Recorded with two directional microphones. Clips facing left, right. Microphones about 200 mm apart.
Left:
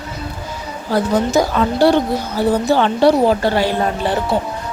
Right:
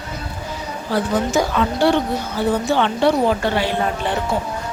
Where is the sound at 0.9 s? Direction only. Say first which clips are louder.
Left 4 dB; 40° left (ahead or behind).